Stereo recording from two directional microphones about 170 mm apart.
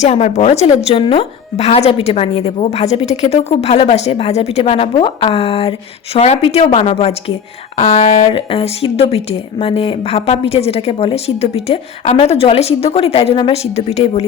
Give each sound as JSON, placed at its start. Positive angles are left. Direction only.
{"t": 0.0, "sound": "speech", "side_deg": 40}